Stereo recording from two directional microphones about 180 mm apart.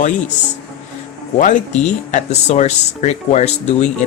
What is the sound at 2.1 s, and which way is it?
Speech, 40° left (ahead or behind).